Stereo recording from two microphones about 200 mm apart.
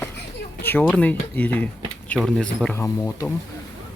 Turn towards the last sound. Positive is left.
turn(degrees=15)  # may be behind; listen again after turning